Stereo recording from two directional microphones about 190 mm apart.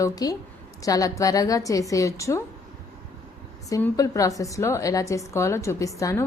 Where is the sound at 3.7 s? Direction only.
15° left (ahead or behind).